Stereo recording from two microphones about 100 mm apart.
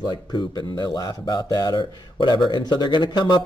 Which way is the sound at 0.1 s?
45° left (ahead or behind).